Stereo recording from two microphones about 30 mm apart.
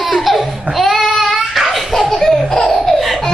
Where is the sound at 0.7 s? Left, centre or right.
Centre.